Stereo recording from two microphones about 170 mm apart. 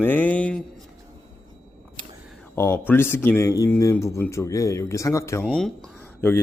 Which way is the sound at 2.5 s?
15° left (ahead or behind).